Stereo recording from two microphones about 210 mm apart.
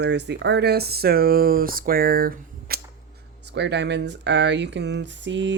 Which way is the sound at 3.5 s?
55° right (ahead or behind).